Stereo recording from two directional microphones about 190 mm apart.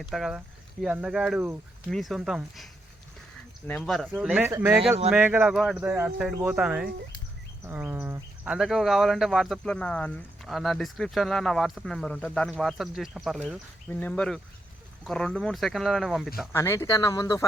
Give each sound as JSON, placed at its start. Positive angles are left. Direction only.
{"t": 0.0, "sound": "speech", "side_deg": 0}
{"t": 3.7, "sound": "speech", "side_deg": 0}
{"t": 16.5, "sound": "speech", "side_deg": 15}